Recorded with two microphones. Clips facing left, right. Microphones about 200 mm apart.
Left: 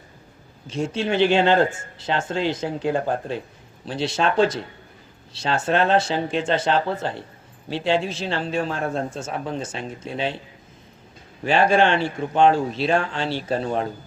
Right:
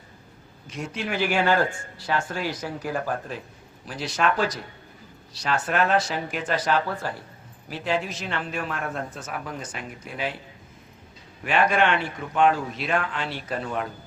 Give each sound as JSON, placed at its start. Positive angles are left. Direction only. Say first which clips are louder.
{"t": 0.7, "sound": "a man's voice", "louder": "left 7 dB", "side_deg": 25}
{"t": 11.4, "sound": "a man's voice", "louder": "left 4 dB", "side_deg": 30}